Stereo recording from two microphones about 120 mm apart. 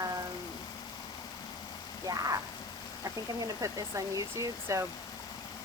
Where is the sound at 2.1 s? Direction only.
30° right (ahead or behind).